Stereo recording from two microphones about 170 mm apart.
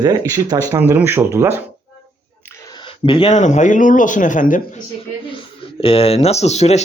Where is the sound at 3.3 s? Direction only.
45° left (ahead or behind).